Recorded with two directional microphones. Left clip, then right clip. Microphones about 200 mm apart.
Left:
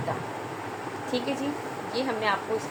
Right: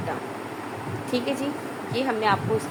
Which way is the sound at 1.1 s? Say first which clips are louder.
Right 3 dB; 35° right (ahead or behind).